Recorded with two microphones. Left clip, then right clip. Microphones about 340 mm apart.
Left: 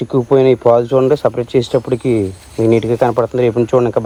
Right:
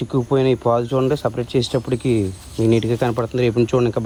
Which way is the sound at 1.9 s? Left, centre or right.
Centre.